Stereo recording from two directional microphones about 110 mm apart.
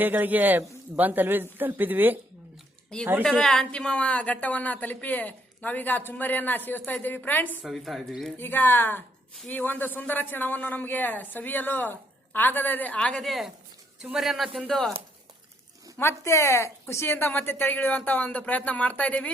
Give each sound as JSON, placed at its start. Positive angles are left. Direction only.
{"t": 0.0, "sound": "speech", "side_deg": -15}
{"t": 2.9, "sound": "speech", "side_deg": 10}
{"t": 7.7, "sound": "a woman's voice", "side_deg": 0}
{"t": 8.4, "sound": "a woman's voice", "side_deg": 20}
{"t": 16.0, "sound": "speech", "side_deg": 25}